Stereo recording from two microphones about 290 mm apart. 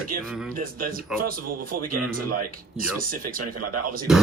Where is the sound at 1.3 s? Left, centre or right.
Right.